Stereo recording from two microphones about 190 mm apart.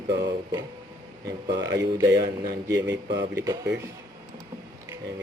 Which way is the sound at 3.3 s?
15° right (ahead or behind).